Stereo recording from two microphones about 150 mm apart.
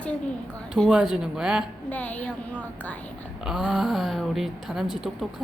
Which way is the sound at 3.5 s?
5° right (ahead or behind).